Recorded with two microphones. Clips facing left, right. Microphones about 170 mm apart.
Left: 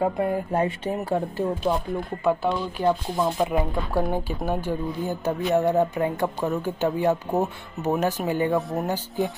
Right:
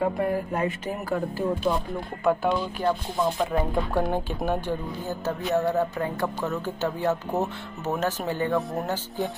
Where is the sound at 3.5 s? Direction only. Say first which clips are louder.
Even; 10° left (ahead or behind).